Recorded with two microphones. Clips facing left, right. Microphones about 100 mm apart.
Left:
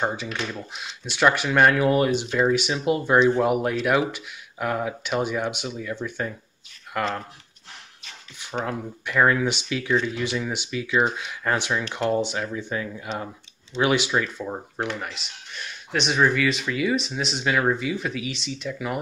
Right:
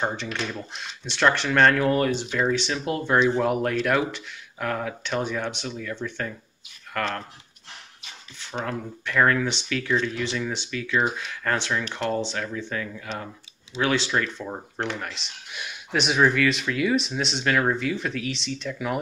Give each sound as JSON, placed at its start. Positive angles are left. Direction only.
{"t": 0.0, "sound": "speech", "side_deg": 5}
{"t": 8.4, "sound": "speech", "side_deg": 15}